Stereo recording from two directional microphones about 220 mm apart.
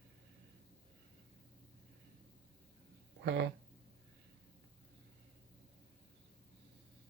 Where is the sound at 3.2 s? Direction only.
55° right (ahead or behind).